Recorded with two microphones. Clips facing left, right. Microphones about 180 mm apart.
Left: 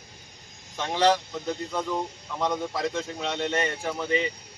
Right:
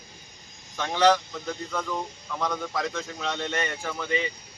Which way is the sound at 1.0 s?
25° left (ahead or behind).